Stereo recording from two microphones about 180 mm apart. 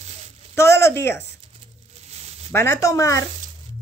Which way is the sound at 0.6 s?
15° left (ahead or behind).